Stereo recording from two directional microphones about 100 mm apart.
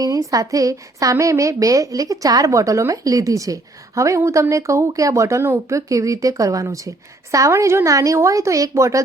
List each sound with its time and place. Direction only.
0.0 s a woman's voice: 35° right (ahead or behind)